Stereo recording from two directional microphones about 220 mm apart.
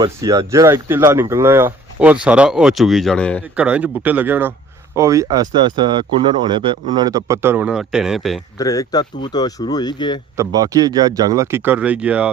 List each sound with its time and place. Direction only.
0.0 s speech: 15° right (ahead or behind); by 3.4 s 5° left (ahead or behind)
3.5 s speech: 5° right (ahead or behind)
8.5 s speech: 15° left (ahead or behind)
10.3 s speech: 15° right (ahead or behind)